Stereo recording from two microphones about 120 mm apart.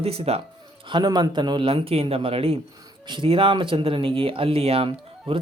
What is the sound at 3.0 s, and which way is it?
Speech, 45° right (ahead or behind).